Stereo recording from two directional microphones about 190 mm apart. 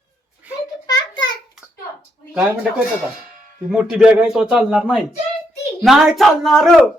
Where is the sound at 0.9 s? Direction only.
20° left (ahead or behind).